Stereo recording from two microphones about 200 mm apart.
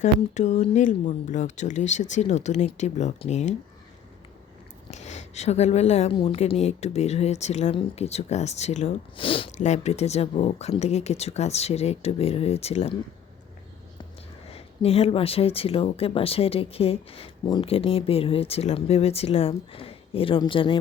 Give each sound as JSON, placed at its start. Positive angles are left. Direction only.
{"t": 0.0, "sound": "a woman's voice", "side_deg": 35}
{"t": 4.9, "sound": "a woman's voice", "side_deg": 35}
{"t": 14.5, "sound": "speech", "side_deg": 30}